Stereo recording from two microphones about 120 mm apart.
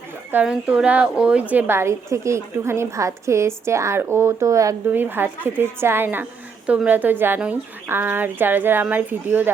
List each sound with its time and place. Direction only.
0.4 s a woman's voice: 5° right (ahead or behind); by 4.7 s 25° right (ahead or behind)
4.9 s speech: 15° right (ahead or behind)